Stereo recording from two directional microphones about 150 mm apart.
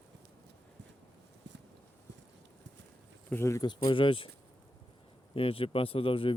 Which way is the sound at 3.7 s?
30° left (ahead or behind).